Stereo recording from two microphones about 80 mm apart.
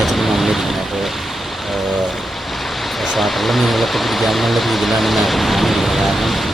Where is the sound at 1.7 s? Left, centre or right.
Centre.